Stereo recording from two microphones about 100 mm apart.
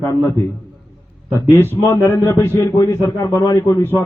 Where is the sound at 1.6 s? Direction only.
25° left (ahead or behind).